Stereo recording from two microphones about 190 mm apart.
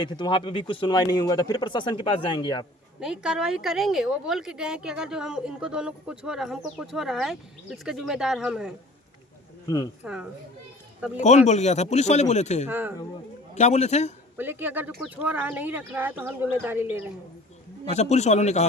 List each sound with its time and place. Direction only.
0.0 s speech: 25° left (ahead or behind)
3.0 s speech: 5° right (ahead or behind)
9.6 s speech: 20° left (ahead or behind)
10.0 s speech: 5° right (ahead or behind)
11.2 s speech: 35° left (ahead or behind)
12.6 s speech: 10° right (ahead or behind)
13.5 s speech: 35° left (ahead or behind)
14.3 s speech: 10° right (ahead or behind)
17.9 s speech: 35° left (ahead or behind)